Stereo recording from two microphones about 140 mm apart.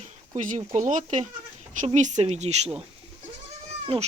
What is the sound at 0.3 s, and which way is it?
Speech, 60° right (ahead or behind).